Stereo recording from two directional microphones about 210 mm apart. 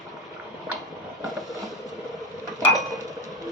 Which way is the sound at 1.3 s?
Centre (ahead or behind).